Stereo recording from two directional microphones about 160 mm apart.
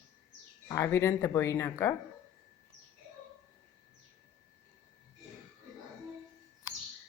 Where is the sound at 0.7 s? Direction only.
20° left (ahead or behind).